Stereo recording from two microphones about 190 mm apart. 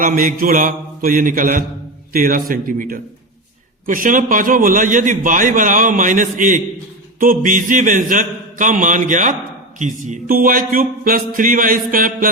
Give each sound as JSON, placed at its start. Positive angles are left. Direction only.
{"t": 0.0, "sound": "a man's voice", "side_deg": -45}